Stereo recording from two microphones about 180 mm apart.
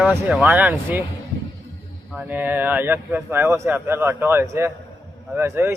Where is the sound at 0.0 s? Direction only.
5° right (ahead or behind).